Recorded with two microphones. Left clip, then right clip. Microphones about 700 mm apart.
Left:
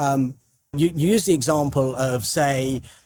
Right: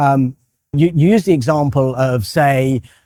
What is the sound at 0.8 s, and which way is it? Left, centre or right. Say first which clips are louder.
A man's voice: right 6 dB; right.